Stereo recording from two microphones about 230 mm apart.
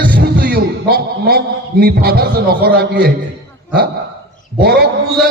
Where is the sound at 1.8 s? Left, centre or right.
Right.